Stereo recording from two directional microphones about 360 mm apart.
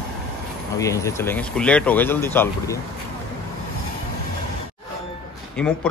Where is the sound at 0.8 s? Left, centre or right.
Centre.